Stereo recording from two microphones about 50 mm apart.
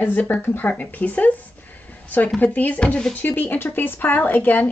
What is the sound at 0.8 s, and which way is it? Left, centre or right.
Speech, left.